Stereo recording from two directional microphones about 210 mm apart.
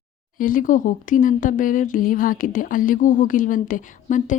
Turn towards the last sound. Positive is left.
turn(degrees=35)  # may be behind; listen again after turning